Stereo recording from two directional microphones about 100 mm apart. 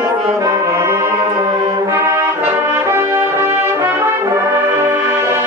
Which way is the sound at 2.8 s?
25° right (ahead or behind).